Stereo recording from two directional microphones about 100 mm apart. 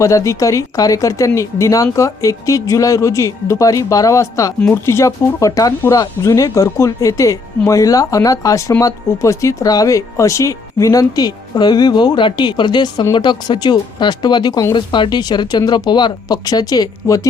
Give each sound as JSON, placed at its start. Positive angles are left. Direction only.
{"t": 0.0, "sound": "speech", "side_deg": 30}